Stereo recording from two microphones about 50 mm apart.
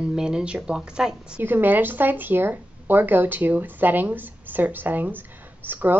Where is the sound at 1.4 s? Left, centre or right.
Right.